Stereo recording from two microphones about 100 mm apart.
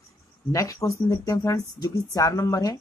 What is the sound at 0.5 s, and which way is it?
Speech, 35° left (ahead or behind).